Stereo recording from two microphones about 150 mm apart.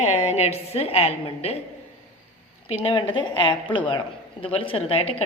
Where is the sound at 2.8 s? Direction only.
30° left (ahead or behind).